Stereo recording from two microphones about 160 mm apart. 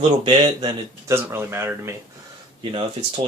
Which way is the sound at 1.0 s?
15° right (ahead or behind).